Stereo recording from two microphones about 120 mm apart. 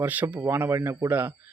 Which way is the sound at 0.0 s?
15° right (ahead or behind).